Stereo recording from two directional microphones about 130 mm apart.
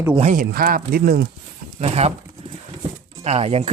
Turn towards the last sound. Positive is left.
turn(degrees=-50)  # may be behind; listen again after turning